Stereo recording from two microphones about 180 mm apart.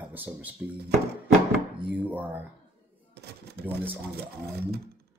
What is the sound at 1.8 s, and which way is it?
Speech, 10° right (ahead or behind).